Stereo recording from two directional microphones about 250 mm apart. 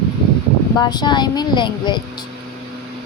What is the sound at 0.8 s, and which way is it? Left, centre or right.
Speech, centre.